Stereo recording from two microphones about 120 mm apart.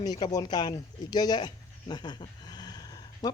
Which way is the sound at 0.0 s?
35° left (ahead or behind).